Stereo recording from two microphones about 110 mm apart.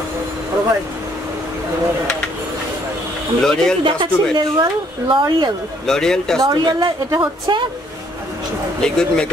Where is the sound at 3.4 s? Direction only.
5° left (ahead or behind).